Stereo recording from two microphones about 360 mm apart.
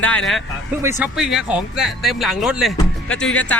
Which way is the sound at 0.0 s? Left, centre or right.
Centre.